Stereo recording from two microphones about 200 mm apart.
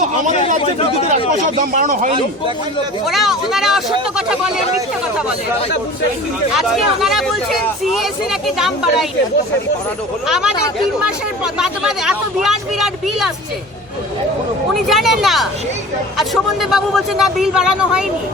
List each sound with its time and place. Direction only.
0.6 s speech: 30° left (ahead or behind)
1.7 s speech: 40° right (ahead or behind)
3.1 s speech: centre (ahead or behind)
6.5 s speech: centre (ahead or behind)
10.2 s speech: 5° right (ahead or behind)
11.5 s speech: 5° right (ahead or behind)
14.7 s speech: centre (ahead or behind)